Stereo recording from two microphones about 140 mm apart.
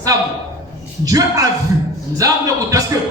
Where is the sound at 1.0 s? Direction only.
25° right (ahead or behind).